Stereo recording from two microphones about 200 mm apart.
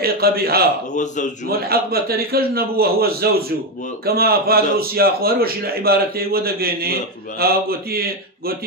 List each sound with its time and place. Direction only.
0.0 s a man's voice: 50° right (ahead or behind)
0.9 s a man's voice: 40° left (ahead or behind)
1.7 s a man's voice: 50° right (ahead or behind)